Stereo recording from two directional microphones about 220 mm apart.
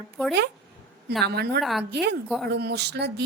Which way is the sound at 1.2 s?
50° right (ahead or behind).